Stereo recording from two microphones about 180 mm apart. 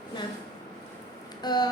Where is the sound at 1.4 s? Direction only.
20° left (ahead or behind).